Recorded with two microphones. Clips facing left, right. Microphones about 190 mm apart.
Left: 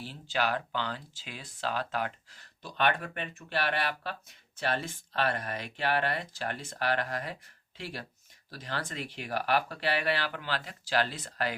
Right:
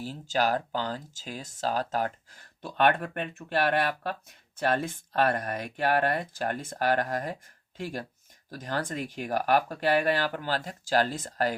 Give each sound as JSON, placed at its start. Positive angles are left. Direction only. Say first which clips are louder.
{"t": 0.0, "sound": "speech", "louder": "right 4 dB", "side_deg": -40}